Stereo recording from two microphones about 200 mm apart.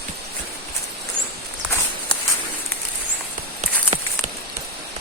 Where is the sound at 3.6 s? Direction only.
35° right (ahead or behind).